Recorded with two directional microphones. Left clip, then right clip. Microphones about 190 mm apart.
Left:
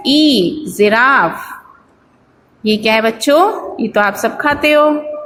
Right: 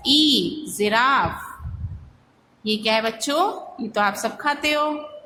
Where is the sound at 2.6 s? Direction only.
25° left (ahead or behind).